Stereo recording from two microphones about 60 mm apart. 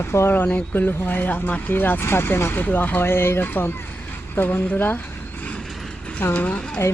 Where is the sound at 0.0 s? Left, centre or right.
Left.